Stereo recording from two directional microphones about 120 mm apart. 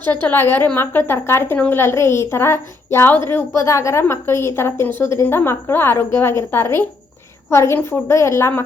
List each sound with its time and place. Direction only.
0.0 s a woman's voice: 15° left (ahead or behind)